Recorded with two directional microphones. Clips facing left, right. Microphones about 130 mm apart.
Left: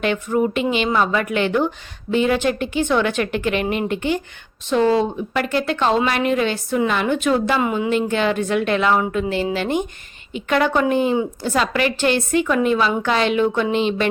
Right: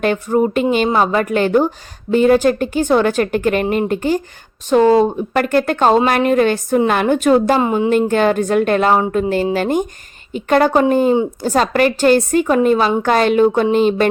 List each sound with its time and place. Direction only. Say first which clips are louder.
0.0 s a woman's voice: right 4 dB; 40° right (ahead or behind)
7.6 s a woman's voice: right 4 dB; 30° right (ahead or behind)
7.9 s a woman's voice: right 5 dB; 45° right (ahead or behind)